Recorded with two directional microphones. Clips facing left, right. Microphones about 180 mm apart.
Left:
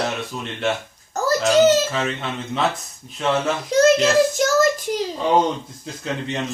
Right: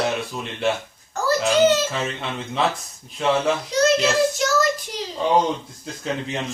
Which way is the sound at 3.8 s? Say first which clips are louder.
Left 4 dB; 50° left (ahead or behind).